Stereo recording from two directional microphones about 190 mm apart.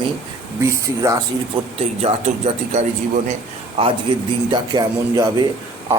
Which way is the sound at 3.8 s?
30° right (ahead or behind).